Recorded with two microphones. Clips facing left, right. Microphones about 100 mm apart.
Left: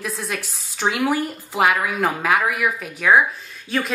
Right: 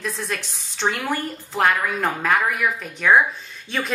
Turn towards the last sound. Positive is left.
turn(degrees=0)  # may be behind; listen again after turning